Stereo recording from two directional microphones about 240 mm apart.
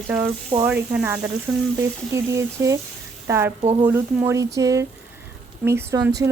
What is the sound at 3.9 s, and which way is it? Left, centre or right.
Speech, centre.